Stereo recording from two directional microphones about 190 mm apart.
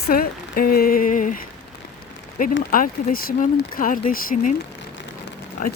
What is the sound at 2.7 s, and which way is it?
Speech, 50° left (ahead or behind).